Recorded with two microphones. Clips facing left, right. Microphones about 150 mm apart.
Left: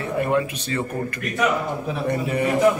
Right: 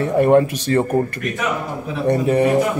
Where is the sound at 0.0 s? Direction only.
40° right (ahead or behind).